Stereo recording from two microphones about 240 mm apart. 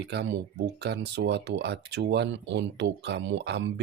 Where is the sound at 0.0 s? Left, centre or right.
Right.